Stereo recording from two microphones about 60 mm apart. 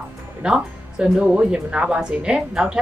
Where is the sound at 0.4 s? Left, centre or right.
Centre.